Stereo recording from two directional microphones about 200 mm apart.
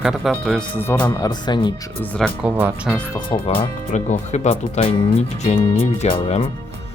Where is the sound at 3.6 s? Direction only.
35° left (ahead or behind).